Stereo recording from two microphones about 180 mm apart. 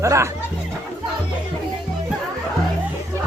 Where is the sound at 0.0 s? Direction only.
15° right (ahead or behind).